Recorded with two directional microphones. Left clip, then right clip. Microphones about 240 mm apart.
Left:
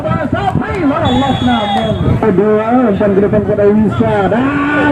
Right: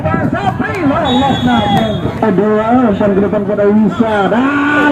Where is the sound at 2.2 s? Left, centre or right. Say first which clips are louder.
Left 1 dB; right.